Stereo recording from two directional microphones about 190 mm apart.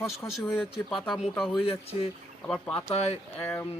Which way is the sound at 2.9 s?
35° left (ahead or behind).